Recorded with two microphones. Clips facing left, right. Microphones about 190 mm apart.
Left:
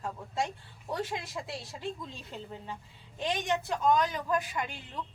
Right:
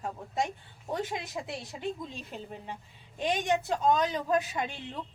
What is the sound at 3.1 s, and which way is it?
A woman's voice, 20° right (ahead or behind).